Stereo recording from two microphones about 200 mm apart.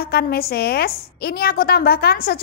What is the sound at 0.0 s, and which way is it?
A woman's voice, 50° left (ahead or behind).